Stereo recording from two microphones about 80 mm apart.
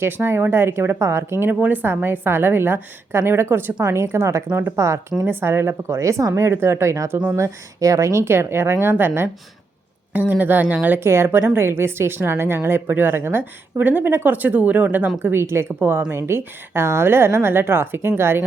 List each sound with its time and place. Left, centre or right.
0.0 s a woman's voice: right